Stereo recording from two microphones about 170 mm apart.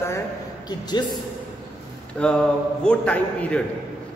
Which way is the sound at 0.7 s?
25° left (ahead or behind).